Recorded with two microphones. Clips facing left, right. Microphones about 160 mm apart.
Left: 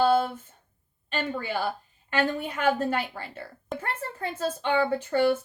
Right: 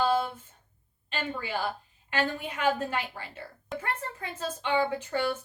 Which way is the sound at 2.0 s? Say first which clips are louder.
Left 4 dB; 45° left (ahead or behind).